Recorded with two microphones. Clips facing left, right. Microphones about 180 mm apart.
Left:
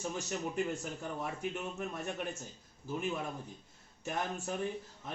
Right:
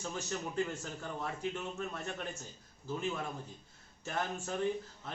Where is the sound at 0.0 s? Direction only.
15° left (ahead or behind).